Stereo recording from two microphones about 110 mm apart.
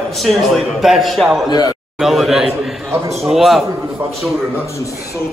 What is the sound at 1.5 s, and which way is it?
Speech, 40° left (ahead or behind).